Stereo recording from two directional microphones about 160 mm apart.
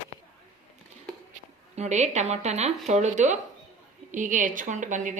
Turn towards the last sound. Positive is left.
turn(degrees=-50)  # may be behind; listen again after turning